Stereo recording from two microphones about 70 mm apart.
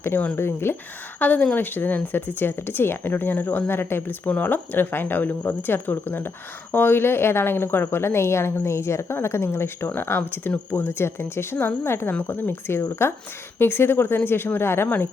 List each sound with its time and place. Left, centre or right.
0.3 s speech: left
1.2 s speech: left